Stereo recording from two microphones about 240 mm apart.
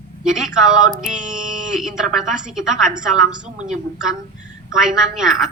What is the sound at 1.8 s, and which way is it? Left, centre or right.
Speech, centre.